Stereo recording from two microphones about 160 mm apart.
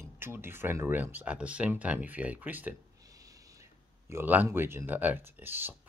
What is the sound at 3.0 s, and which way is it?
Speech, 20° right (ahead or behind).